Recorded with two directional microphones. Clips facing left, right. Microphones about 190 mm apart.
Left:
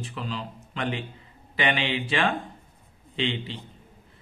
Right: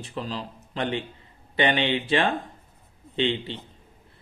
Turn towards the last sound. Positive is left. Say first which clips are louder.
# right 3 dB
turn(degrees=-35)  # may be behind; listen again after turning